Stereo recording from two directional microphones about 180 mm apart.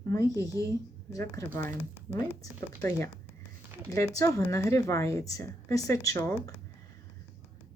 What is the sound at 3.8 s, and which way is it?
Speech, 20° left (ahead or behind).